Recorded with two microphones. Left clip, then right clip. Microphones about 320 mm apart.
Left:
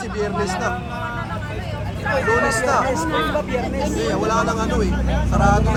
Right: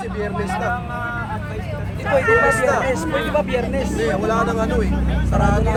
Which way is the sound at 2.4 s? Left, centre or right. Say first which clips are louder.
Right 2 dB; right.